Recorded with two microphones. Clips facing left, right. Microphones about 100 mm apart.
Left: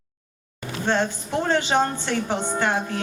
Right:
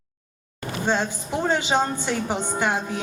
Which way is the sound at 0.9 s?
15° right (ahead or behind).